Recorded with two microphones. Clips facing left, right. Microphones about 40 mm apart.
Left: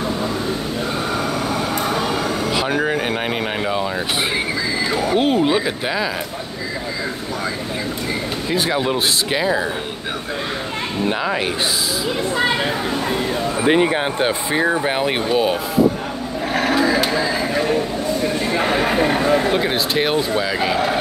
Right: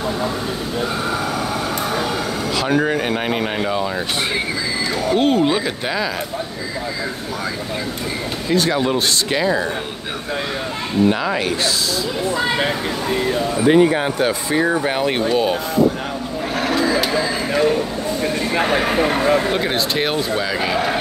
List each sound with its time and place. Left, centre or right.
1.1 s vehicle: centre
2.5 s speech: centre
4.9 s speech: centre
8.5 s speech: centre
11.1 s speech: centre
13.6 s speech: left
16.5 s a sound: centre